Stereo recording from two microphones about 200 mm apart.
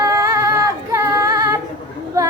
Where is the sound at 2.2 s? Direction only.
15° right (ahead or behind).